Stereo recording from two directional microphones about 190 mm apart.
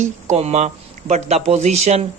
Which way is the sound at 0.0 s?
35° right (ahead or behind).